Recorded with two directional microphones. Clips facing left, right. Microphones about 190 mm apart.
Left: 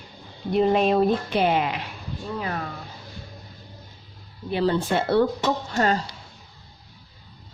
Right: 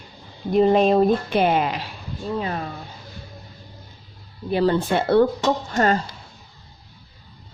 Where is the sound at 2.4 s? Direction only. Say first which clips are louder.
Right 3 dB; 25° right (ahead or behind).